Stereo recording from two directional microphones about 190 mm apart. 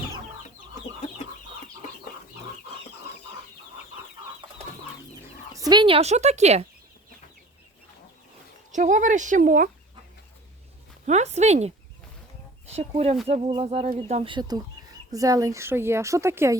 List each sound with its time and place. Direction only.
5.2 s speech: 20° right (ahead or behind); by 6.7 s 35° right (ahead or behind)
8.7 s speech: 40° right (ahead or behind)
11.0 s speech: 35° right (ahead or behind)
12.7 s a woman's voice: 30° right (ahead or behind); by 16.6 s 15° right (ahead or behind)